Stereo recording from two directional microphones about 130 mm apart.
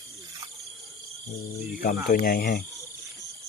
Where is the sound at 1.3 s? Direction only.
65° left (ahead or behind).